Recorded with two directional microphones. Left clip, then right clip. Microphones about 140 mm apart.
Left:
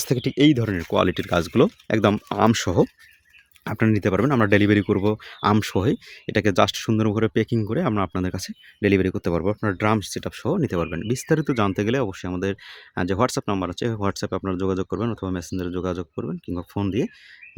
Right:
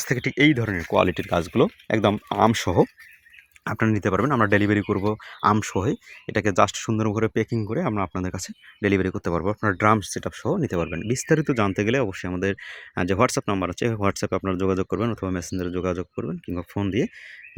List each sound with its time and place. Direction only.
0.0 s speech: 45° left (ahead or behind)
0.5 s speech: 65° left (ahead or behind)
0.9 s speech: 30° left (ahead or behind)
3.8 s speech: 40° left (ahead or behind)
4.5 s speech: 80° left
5.9 s speech: 80° left
7.5 s speech: 45° left (ahead or behind)
8.4 s speech: 60° left (ahead or behind)
9.6 s speech: 25° left (ahead or behind)
11.1 s speech: 15° left (ahead or behind)